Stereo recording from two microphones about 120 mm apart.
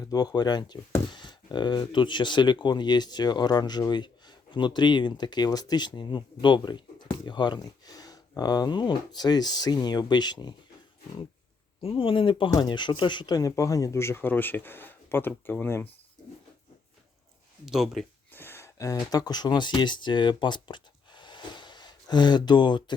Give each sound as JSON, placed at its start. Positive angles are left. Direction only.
{"t": 0.0, "sound": "speech", "side_deg": 35}
{"t": 11.8, "sound": "speech", "side_deg": 50}
{"t": 17.7, "sound": "speech", "side_deg": -5}
{"t": 18.3, "sound": "speech", "side_deg": 20}